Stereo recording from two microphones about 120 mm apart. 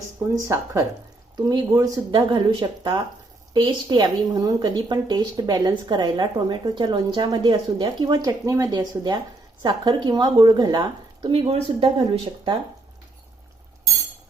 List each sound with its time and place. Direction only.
0.3 s a woman's voice: 25° right (ahead or behind)
11.2 s speech: 50° right (ahead or behind)